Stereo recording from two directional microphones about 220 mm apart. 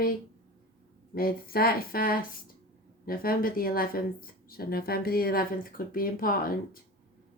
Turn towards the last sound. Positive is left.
turn(degrees=40)  # may be behind; listen again after turning